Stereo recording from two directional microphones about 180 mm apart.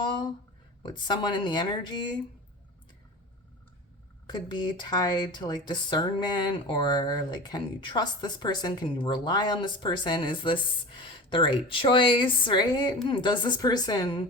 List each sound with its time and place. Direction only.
0.0 s a sound: 25° left (ahead or behind)
0.8 s speech: 25° left (ahead or behind)
4.3 s speech: 25° left (ahead or behind)